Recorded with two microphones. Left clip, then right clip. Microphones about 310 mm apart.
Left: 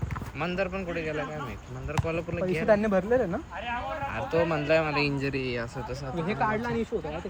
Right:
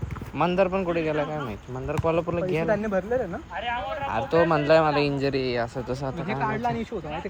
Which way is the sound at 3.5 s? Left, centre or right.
Right.